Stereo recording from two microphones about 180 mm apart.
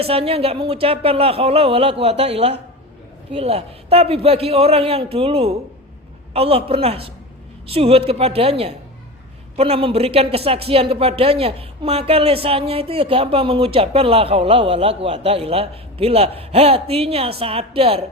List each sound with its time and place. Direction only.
0.0 s speech: 30° right (ahead or behind)